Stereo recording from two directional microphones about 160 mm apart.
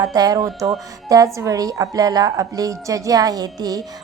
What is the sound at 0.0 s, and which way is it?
A woman's voice, 25° right (ahead or behind).